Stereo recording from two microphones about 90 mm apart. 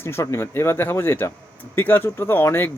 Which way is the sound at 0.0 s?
30° left (ahead or behind).